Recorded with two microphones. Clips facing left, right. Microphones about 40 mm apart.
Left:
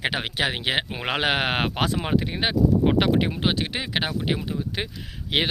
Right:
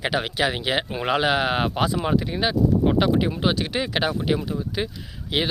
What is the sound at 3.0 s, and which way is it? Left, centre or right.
Speech, left.